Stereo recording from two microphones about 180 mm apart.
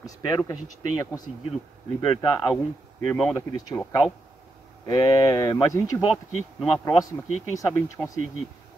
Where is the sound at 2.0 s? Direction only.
30° left (ahead or behind).